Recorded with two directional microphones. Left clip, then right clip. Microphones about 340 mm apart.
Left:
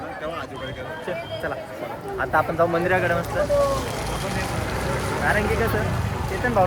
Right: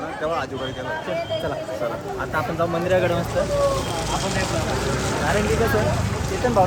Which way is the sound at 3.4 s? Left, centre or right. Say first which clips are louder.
Left 1 dB; left.